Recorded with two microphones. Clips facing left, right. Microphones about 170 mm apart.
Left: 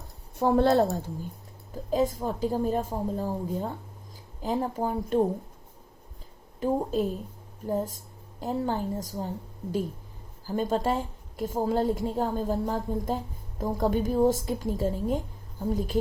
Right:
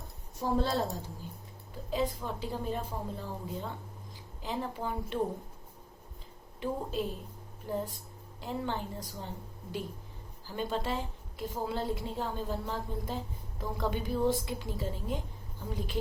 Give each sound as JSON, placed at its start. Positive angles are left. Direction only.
{"t": 0.3, "sound": "a woman's voice", "side_deg": 60}
{"t": 6.6, "sound": "a woman's voice", "side_deg": 40}
{"t": 10.4, "sound": "a woman's voice", "side_deg": 40}